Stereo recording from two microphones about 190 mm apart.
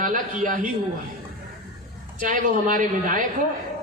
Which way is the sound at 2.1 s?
45° right (ahead or behind).